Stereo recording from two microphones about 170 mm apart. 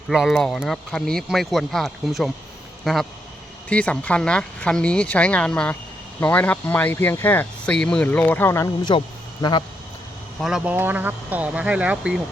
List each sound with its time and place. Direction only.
0.1 s speech: centre (ahead or behind); by 9.6 s 25° left (ahead or behind)
10.4 s speech: 5° right (ahead or behind)